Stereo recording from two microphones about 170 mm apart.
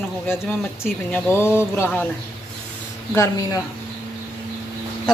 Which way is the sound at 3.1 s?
20° left (ahead or behind).